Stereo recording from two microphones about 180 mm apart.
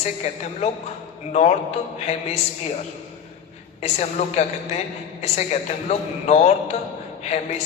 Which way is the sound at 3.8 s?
40° left (ahead or behind).